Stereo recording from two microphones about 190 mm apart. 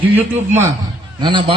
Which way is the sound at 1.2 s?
25° right (ahead or behind).